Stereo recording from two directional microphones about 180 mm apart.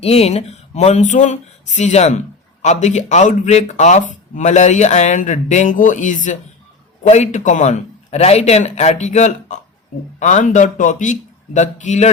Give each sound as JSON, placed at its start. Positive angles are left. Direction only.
{"t": 0.0, "sound": "a man's voice", "side_deg": 35}